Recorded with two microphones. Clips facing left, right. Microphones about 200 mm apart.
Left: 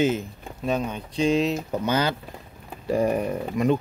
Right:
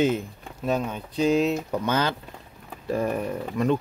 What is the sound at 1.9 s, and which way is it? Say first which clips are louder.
Speech: left 2 dB; 10° left (ahead or behind).